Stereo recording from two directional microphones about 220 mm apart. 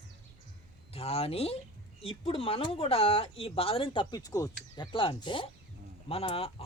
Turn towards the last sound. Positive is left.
turn(degrees=25)  # may be behind; listen again after turning